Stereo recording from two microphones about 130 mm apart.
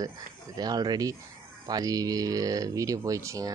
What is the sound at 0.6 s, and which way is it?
Speech, 30° right (ahead or behind).